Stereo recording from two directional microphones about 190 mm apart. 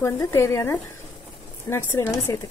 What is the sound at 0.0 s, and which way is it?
Speech, 15° left (ahead or behind).